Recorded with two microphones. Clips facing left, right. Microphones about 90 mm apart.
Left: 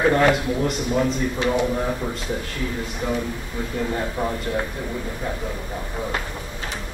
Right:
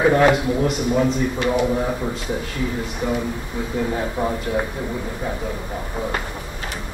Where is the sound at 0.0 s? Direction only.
5° right (ahead or behind).